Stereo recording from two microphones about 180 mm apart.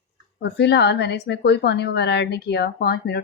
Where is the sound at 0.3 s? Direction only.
70° left (ahead or behind).